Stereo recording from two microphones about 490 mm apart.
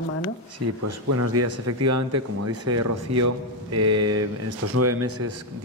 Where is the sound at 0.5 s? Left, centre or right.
Right.